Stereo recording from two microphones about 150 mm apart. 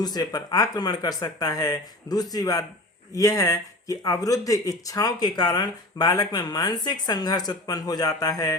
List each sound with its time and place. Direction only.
0.0 s speech: 25° left (ahead or behind)